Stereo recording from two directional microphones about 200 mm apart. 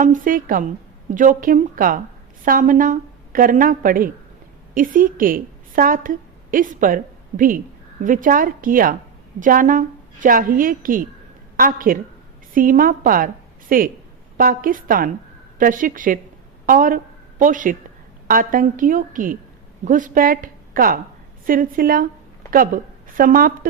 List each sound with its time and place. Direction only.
0.0 s a woman's voice: 40° right (ahead or behind)